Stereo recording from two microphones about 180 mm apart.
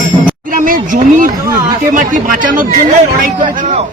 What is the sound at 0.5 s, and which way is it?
Speech, 50° right (ahead or behind).